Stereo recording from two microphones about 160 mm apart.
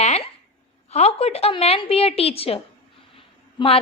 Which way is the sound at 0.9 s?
40° left (ahead or behind).